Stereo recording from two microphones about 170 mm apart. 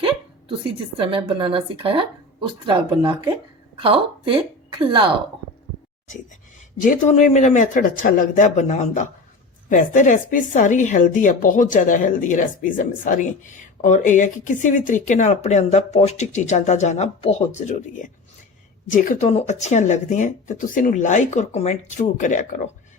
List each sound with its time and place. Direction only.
0.0 s a woman's voice: 30° right (ahead or behind)
6.8 s speech: 50° left (ahead or behind)